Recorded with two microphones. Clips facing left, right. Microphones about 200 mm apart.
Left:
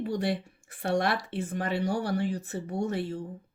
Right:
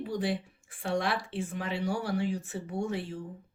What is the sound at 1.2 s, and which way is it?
A woman's voice, 40° left (ahead or behind).